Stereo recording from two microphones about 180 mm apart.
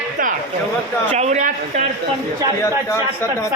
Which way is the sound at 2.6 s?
15° left (ahead or behind).